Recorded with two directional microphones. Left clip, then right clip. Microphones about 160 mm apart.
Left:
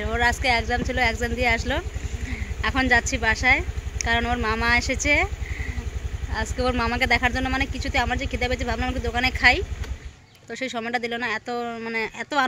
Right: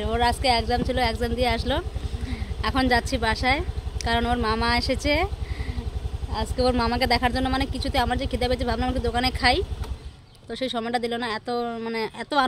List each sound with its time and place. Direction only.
0.0 s speech: 15° right (ahead or behind)
6.3 s speech: 20° right (ahead or behind)